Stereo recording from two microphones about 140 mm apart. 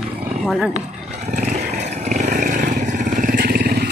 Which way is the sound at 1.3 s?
55° right (ahead or behind).